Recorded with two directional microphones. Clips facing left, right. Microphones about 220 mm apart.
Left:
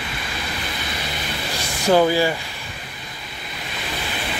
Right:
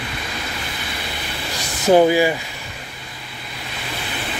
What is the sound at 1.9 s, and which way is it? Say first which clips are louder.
Speech: right 3 dB; 20° right (ahead or behind).